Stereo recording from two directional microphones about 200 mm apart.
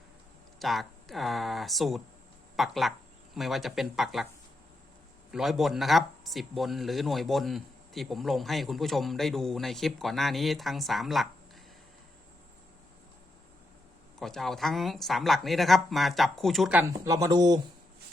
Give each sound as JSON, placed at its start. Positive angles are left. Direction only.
{"t": 0.6, "sound": "speech", "side_deg": 0}
{"t": 5.3, "sound": "speech", "side_deg": 0}
{"t": 14.2, "sound": "speech", "side_deg": 0}
{"t": 17.1, "sound": "speech", "side_deg": -20}